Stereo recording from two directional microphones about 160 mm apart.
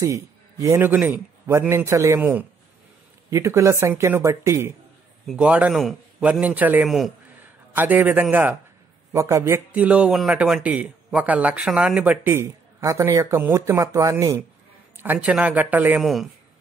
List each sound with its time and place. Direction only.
0.0 s speech: 20° right (ahead or behind)
5.2 s a man's voice: 5° right (ahead or behind)